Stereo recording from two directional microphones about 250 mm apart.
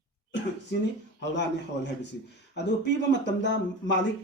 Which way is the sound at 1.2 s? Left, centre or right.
Left.